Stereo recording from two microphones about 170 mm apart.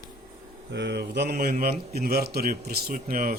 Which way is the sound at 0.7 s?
85° right.